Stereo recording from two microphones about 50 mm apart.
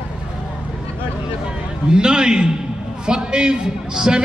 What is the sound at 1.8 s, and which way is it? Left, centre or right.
A man's voice, centre.